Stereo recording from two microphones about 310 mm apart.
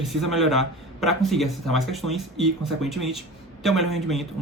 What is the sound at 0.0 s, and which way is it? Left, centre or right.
Speech, centre.